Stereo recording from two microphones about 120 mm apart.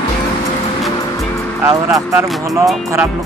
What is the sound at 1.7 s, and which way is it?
Speech, 25° right (ahead or behind).